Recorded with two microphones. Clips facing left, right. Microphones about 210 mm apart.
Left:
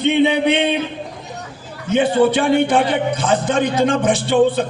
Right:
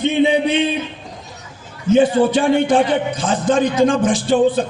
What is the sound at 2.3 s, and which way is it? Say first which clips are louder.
A man's voice: right 1 dB; 60° left (ahead or behind).